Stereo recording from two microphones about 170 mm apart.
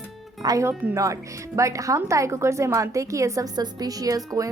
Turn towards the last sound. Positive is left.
turn(degrees=-20)  # may be behind; listen again after turning